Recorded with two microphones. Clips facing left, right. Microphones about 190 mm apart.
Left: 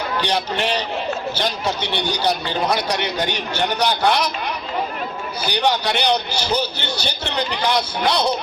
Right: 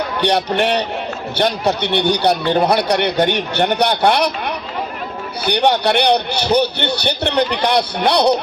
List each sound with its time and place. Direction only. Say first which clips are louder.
0.2 s speech: right 7 dB; 60° right (ahead or behind)